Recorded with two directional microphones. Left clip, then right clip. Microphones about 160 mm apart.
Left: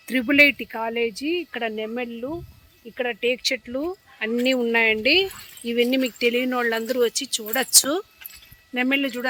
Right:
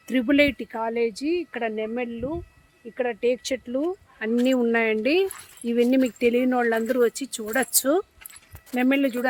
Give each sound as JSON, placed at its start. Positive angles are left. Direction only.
{"t": 0.1, "sound": "speech", "side_deg": -15}
{"t": 2.9, "sound": "speech", "side_deg": -10}
{"t": 4.4, "sound": "speech", "side_deg": -55}
{"t": 6.8, "sound": "speech", "side_deg": -80}
{"t": 8.7, "sound": "speech", "side_deg": -75}